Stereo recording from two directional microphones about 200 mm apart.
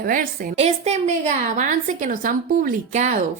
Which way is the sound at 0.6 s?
35° right (ahead or behind).